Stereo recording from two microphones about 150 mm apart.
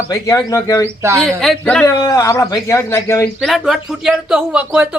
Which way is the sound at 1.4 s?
5° left (ahead or behind).